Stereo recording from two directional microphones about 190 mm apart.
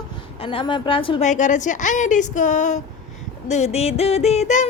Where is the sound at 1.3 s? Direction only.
40° left (ahead or behind).